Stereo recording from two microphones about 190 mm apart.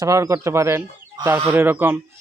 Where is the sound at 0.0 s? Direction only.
15° right (ahead or behind).